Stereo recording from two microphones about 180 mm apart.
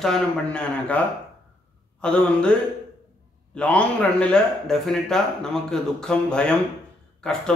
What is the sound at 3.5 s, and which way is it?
A man's voice, 5° left (ahead or behind).